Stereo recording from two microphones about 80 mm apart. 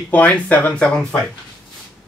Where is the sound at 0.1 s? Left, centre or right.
Centre.